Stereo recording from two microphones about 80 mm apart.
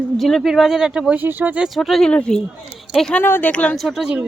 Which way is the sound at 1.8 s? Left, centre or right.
Centre.